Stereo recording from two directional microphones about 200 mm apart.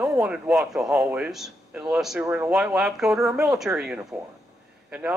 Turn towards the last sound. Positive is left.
turn(degrees=-5)  # may be behind; listen again after turning